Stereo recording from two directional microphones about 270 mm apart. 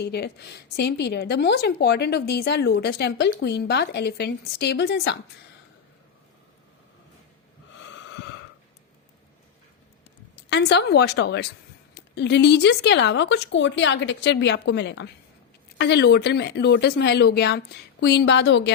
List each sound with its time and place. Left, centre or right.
0.0 s a woman's voice: left
7.8 s snort: left
10.5 s a woman's voice: left